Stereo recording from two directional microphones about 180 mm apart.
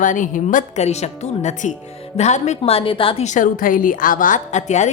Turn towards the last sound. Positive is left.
turn(degrees=40)  # may be behind; listen again after turning